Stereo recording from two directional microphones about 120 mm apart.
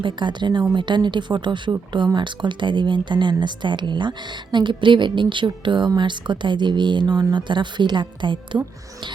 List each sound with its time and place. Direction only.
0.0 s speech: 40° right (ahead or behind)